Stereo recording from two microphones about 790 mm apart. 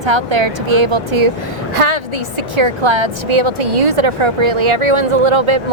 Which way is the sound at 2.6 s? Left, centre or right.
Right.